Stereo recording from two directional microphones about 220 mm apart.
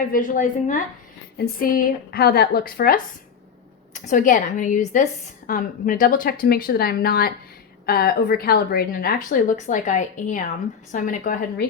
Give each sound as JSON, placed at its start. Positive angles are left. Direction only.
{"t": 0.1, "sound": "a woman's voice", "side_deg": 35}
{"t": 4.0, "sound": "a woman's voice", "side_deg": 35}